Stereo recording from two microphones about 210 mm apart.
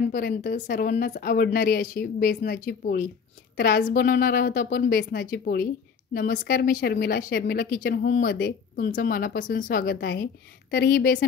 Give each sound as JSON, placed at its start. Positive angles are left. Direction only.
{"t": 0.1, "sound": "a woman's voice", "side_deg": 40}